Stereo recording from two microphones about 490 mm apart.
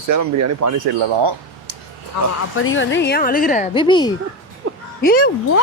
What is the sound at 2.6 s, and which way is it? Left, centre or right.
A woman's voice, left.